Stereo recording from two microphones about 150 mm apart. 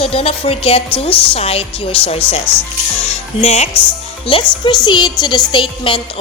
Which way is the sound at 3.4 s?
45° left (ahead or behind).